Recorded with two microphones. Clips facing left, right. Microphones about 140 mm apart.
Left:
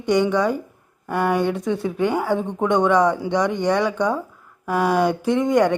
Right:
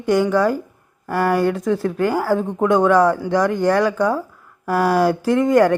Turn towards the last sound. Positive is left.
turn(degrees=0)  # may be behind; listen again after turning